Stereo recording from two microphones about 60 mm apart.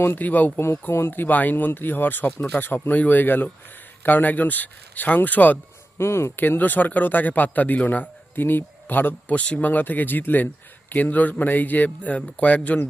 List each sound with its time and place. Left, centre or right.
0.0 s a man's voice: left
0.6 s a man's voice: left
6.0 s speech: left
6.3 s a man's voice: left
9.3 s a man's voice: left